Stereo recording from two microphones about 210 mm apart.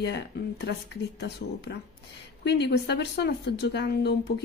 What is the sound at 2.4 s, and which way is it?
Speech, 55° left (ahead or behind).